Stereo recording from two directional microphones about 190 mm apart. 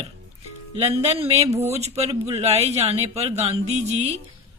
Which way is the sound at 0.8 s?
30° right (ahead or behind).